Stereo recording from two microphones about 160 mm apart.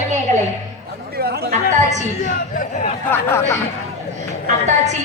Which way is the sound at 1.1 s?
75° right (ahead or behind).